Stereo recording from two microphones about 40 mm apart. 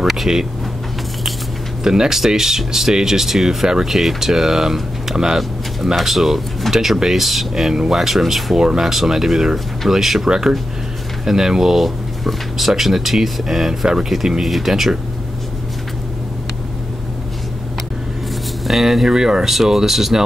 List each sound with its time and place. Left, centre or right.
0.0 s speech: centre
1.8 s speech: centre
3.9 s speech: centre
5.9 s speech: centre
8.5 s speech: centre
18.7 s speech: centre